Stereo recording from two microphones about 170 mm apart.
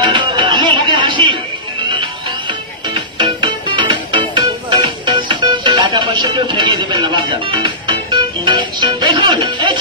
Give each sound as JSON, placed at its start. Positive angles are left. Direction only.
{"t": 0.0, "sound": "music", "side_deg": -25}
{"t": 3.2, "sound": "music", "side_deg": -30}